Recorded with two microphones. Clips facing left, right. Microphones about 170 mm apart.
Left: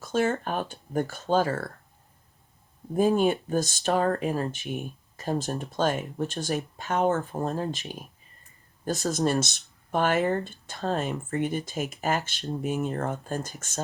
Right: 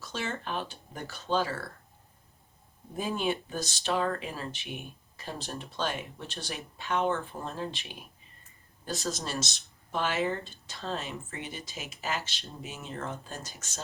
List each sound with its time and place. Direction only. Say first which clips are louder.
0.0 s speech: left 10 dB; 50° left (ahead or behind)
2.9 s speech: left 9 dB; 50° left (ahead or behind)
9.0 s speech: left 10 dB; 50° left (ahead or behind)